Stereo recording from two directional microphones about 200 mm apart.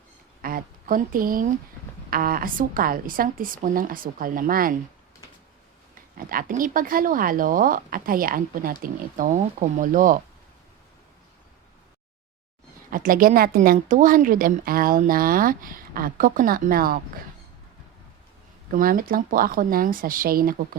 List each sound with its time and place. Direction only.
0.4 s a sound: 45° right (ahead or behind)
2.0 s speech: 45° right (ahead or behind)
5.9 s speech: 45° right (ahead or behind)
12.9 s speech: 45° right (ahead or behind)
18.7 s speech: 45° right (ahead or behind)